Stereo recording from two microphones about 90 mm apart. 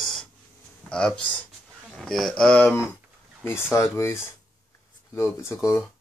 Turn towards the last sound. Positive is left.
turn(degrees=30)  # may be behind; listen again after turning